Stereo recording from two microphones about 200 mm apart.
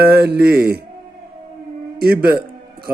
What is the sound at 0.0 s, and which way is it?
Speech, 50° right (ahead or behind).